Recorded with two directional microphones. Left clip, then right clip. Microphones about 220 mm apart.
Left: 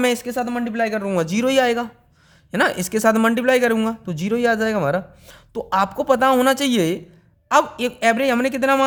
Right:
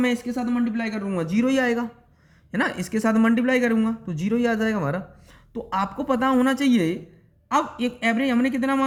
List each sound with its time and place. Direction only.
0.0 s a man's voice: 50° left (ahead or behind)
1.6 s speech: 30° left (ahead or behind)
4.2 s a man's voice: 30° left (ahead or behind)